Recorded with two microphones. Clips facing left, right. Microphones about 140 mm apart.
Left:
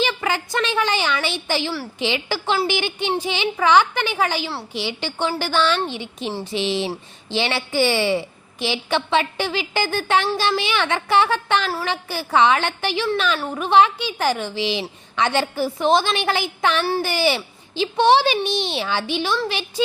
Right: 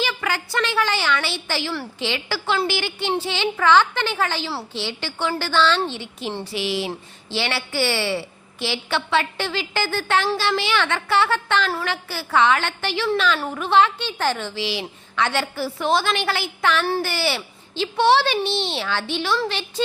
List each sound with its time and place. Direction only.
0.0 s a woman's voice: 20° left (ahead or behind)